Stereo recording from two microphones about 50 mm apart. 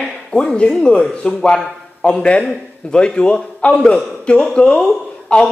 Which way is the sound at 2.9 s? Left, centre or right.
Centre.